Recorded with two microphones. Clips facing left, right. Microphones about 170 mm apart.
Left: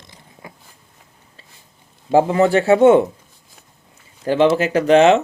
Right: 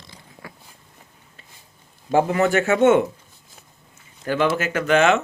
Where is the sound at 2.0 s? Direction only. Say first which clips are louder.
Left 4 dB; 30° left (ahead or behind).